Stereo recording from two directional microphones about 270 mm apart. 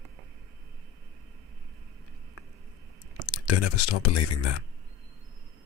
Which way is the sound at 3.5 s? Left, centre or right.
Left.